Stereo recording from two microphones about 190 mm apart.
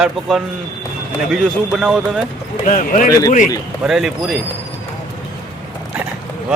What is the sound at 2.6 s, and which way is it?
Speech, 45° left (ahead or behind).